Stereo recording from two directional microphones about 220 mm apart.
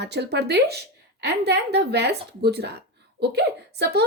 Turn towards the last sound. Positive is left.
turn(degrees=-50)  # may be behind; listen again after turning